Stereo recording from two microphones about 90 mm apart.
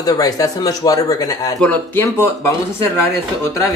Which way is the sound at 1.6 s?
15° left (ahead or behind).